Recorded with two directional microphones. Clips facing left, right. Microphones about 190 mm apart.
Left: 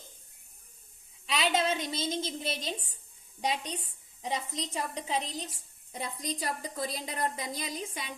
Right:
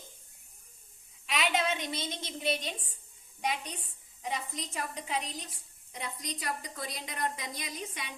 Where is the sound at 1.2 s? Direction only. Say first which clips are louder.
Left 1 dB; 30° left (ahead or behind).